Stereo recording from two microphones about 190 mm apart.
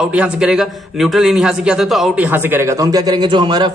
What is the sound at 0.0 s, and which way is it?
A man's voice, 5° right (ahead or behind).